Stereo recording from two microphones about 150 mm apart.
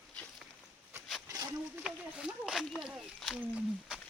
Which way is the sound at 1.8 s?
5° right (ahead or behind).